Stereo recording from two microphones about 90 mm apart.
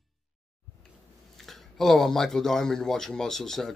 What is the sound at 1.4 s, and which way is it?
Speech, centre (ahead or behind).